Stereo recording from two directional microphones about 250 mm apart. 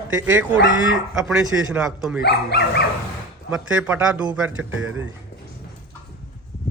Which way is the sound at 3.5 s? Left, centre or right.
Centre.